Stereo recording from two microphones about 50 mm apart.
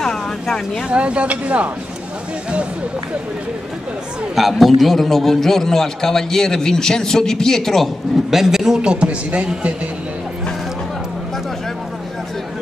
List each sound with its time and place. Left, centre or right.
0.0 s vehicle: centre
0.8 s speech: right
4.4 s a man's voice: centre
8.3 s a man's voice: centre; by 9.5 s right